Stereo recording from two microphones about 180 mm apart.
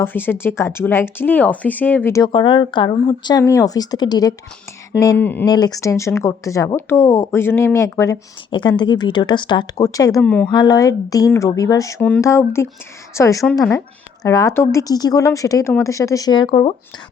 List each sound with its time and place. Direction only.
0.0 s speech: 10° left (ahead or behind)
2.2 s speech: 25° left (ahead or behind); by 5.5 s 10° left (ahead or behind)
5.5 s speech: 20° left (ahead or behind)
10.2 s speech: 5° left (ahead or behind)
10.5 s speech: 20° left (ahead or behind)